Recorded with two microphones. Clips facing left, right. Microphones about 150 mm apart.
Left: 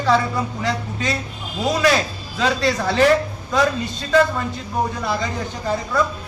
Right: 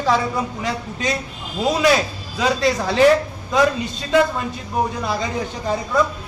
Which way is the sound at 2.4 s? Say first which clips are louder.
Right 1 dB; 15° right (ahead or behind).